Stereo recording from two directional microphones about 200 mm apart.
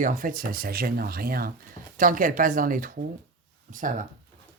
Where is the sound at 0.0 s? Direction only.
40° right (ahead or behind).